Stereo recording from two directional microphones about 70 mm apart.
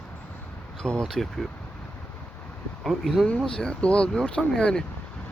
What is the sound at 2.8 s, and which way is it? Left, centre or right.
Speech, centre.